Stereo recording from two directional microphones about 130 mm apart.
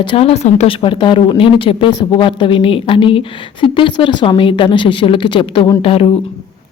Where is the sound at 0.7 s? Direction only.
40° left (ahead or behind).